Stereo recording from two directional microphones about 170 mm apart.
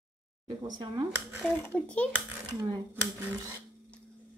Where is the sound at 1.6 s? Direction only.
10° left (ahead or behind).